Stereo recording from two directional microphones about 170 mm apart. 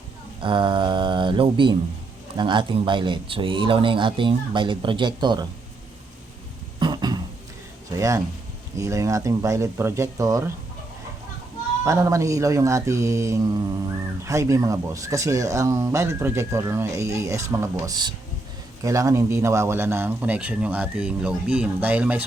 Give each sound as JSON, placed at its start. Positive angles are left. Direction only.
{"t": 0.3, "sound": "speech", "side_deg": -30}
{"t": 6.7, "sound": "a sound", "side_deg": -25}
{"t": 7.9, "sound": "speech", "side_deg": -20}
{"t": 11.9, "sound": "speech", "side_deg": -15}